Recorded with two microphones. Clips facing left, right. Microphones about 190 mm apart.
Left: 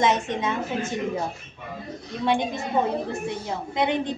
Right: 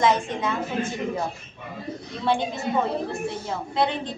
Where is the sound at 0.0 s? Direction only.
20° left (ahead or behind).